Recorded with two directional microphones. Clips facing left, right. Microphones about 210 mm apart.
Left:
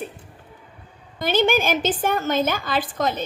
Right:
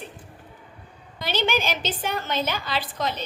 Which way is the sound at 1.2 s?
50° left (ahead or behind).